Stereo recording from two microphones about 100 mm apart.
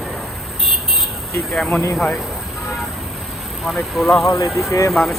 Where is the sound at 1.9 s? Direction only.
10° left (ahead or behind).